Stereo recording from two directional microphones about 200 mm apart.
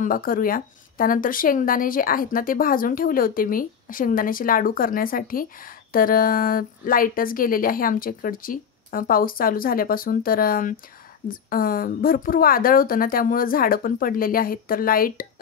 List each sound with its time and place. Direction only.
0.0 s speech: 45° left (ahead or behind)